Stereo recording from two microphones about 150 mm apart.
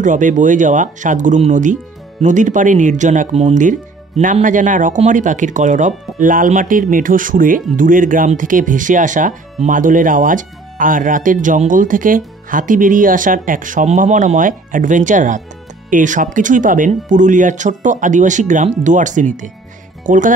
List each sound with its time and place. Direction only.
0.0 s speech: 55° right (ahead or behind)